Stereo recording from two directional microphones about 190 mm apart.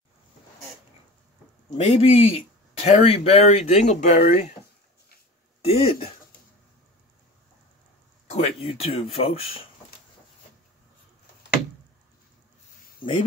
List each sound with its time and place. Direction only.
1.8 s speech: 35° left (ahead or behind)
5.7 s speech: 30° left (ahead or behind)
8.3 s speech: 30° left (ahead or behind)